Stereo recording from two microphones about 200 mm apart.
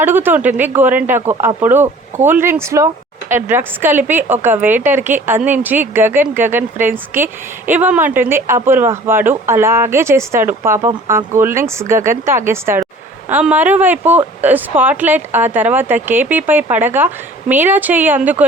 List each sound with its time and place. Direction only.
0.0 s a woman's voice: 10° right (ahead or behind)